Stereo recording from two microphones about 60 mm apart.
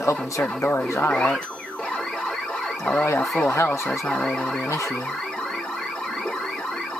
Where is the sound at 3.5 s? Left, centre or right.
Left.